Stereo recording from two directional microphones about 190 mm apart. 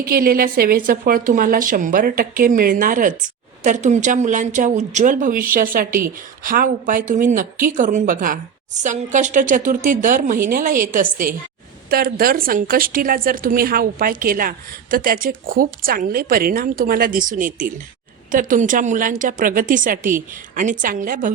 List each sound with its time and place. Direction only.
0.0 s a woman's voice: 50° right (ahead or behind)